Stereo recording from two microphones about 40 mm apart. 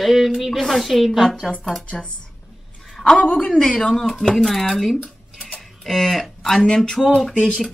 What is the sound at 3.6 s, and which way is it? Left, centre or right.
Speech, centre.